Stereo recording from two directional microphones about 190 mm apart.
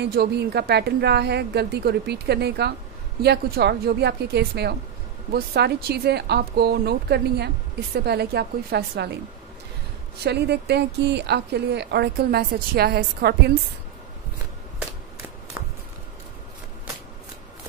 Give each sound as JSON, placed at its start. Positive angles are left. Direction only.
{"t": 0.0, "sound": "speech", "side_deg": -55}
{"t": 10.2, "sound": "speech", "side_deg": -60}